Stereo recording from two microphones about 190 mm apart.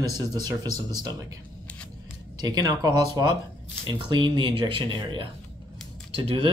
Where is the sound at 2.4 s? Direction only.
20° right (ahead or behind).